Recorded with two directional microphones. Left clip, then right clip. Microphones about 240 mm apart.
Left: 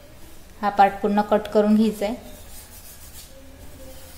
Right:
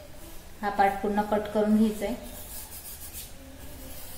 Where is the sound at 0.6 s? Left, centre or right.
Left.